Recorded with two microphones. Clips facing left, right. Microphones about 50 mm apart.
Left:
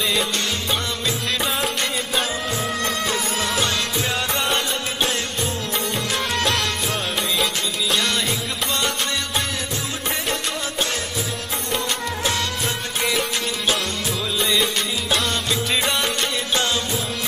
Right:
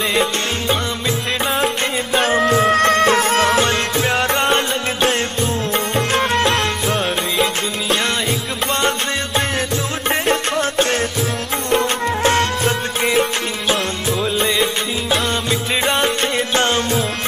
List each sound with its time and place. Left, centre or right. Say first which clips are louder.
0.1 s music: right 4 dB; right
2.1 s music: right 12 dB; right
10.0 s music: right 8 dB; right
13.0 s music: right 5 dB; right
15.9 s music: right 5 dB; right